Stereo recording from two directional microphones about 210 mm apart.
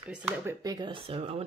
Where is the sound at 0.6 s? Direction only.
20° right (ahead or behind).